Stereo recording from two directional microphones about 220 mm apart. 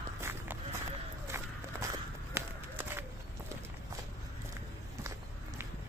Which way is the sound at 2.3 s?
10° right (ahead or behind).